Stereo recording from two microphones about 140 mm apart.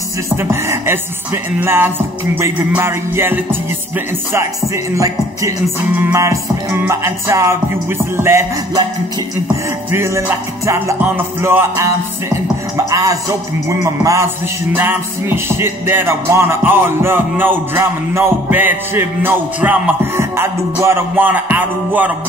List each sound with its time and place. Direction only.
0.4 s music: 20° right (ahead or behind)
4.9 s music: 20° right (ahead or behind)
9.8 s music: 15° right (ahead or behind)